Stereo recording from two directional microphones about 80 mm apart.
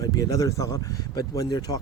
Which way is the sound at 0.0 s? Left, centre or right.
Left.